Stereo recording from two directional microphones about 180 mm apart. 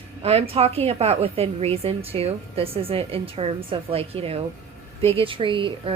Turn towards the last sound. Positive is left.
turn(degrees=-30)  # may be behind; listen again after turning